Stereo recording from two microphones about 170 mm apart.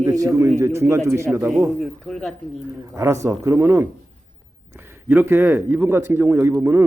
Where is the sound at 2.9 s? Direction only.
15° right (ahead or behind).